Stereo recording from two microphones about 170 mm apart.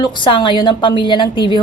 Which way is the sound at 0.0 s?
30° left (ahead or behind).